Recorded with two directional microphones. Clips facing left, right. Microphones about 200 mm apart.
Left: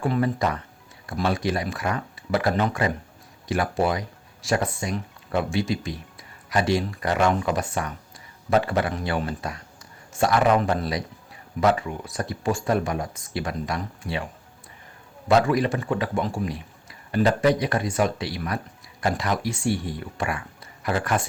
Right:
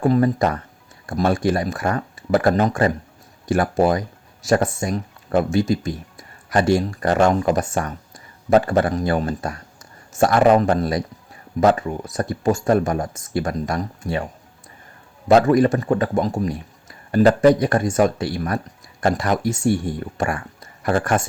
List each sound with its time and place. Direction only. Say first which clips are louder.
0.0 s speech: right 6 dB; 45° right (ahead or behind)
15.3 s speech: right 6 dB; 45° right (ahead or behind)